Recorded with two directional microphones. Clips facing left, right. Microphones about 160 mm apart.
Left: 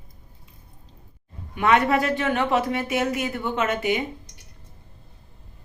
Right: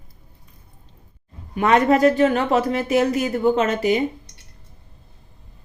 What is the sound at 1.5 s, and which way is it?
Speech, 35° right (ahead or behind).